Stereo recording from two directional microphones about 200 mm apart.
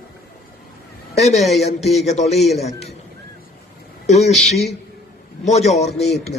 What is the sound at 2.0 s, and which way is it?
Speech, 35° left (ahead or behind).